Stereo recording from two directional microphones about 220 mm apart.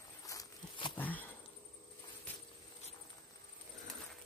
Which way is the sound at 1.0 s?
5° left (ahead or behind).